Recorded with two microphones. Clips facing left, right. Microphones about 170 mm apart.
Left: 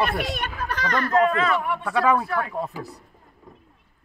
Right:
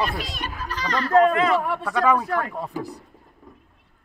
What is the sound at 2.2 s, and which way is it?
Speech, 40° right (ahead or behind).